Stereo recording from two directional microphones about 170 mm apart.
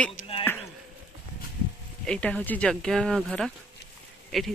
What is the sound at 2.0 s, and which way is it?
Speech, 5° left (ahead or behind).